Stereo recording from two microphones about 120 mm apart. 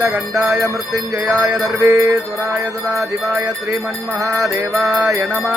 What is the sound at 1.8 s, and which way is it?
Mantra, 25° right (ahead or behind).